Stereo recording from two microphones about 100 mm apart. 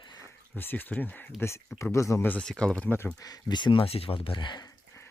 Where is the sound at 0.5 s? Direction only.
20° left (ahead or behind).